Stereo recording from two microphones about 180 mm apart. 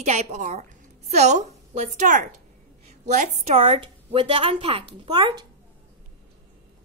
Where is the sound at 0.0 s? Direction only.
40° right (ahead or behind).